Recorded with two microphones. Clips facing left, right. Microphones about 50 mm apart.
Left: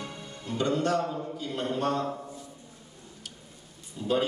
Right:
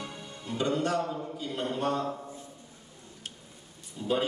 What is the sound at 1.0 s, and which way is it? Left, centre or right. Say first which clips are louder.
Speech: left 1 dB; centre.